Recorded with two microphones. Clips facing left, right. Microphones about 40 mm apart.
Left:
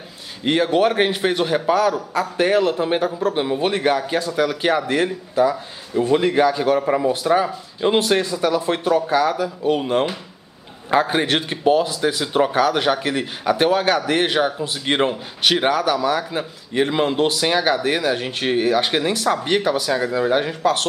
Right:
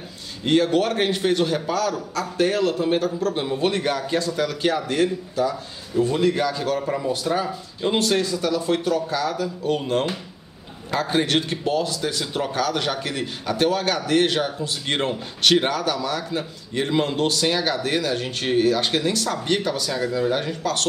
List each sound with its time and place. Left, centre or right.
0.4 s speech: centre